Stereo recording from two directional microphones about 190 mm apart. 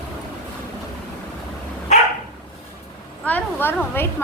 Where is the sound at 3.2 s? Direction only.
10° left (ahead or behind).